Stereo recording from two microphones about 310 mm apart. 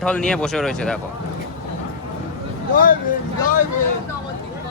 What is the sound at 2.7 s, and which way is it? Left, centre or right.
Speech, left.